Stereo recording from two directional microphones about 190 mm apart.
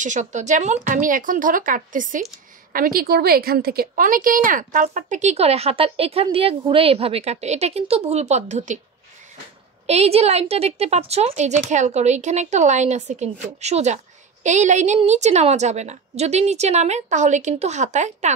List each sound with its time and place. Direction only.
0.0 s a woman's voice: 40° right (ahead or behind)
9.8 s a woman's voice: 35° right (ahead or behind)